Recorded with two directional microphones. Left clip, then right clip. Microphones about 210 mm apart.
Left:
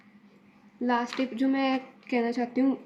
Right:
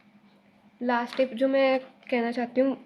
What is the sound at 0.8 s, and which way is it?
A woman's voice, 50° right (ahead or behind).